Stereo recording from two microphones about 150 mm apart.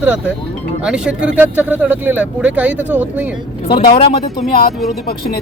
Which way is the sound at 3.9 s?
40° left (ahead or behind).